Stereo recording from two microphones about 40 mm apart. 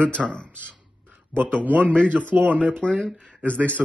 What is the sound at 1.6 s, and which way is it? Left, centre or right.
Speech, right.